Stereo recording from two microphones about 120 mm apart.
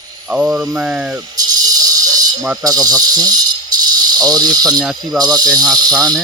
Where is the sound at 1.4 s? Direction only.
30° right (ahead or behind).